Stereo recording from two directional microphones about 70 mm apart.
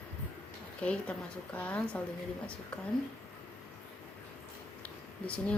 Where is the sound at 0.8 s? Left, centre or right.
Centre.